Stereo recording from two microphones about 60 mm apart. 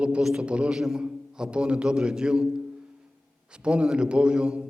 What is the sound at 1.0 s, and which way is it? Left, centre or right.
A man's voice, centre.